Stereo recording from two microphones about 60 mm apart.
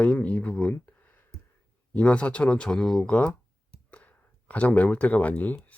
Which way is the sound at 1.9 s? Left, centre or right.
Left.